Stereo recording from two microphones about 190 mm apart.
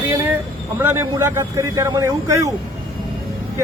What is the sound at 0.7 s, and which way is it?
A man's voice, 15° right (ahead or behind).